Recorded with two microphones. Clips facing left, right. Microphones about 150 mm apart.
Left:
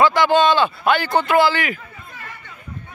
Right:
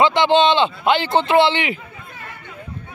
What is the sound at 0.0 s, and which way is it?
A man's voice, 25° right (ahead or behind).